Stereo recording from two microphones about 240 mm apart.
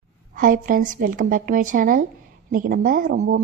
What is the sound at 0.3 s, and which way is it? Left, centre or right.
Speech, right.